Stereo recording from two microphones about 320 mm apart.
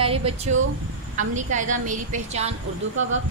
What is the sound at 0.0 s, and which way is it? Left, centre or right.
A woman's voice, centre.